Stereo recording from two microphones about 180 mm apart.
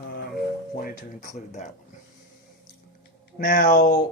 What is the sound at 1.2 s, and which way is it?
Speech, 45° left (ahead or behind).